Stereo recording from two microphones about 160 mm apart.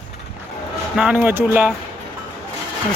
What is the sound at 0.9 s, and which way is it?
Speech, 5° right (ahead or behind).